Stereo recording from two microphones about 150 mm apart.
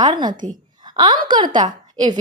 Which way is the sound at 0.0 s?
30° right (ahead or behind).